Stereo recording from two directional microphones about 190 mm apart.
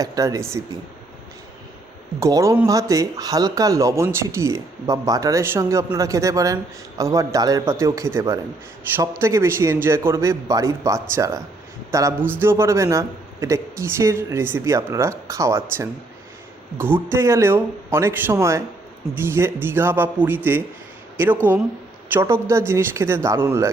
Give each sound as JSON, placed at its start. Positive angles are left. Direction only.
{"t": 0.0, "sound": "speech", "side_deg": -20}
{"t": 2.1, "sound": "speech", "side_deg": -15}
{"t": 16.7, "sound": "speech", "side_deg": -10}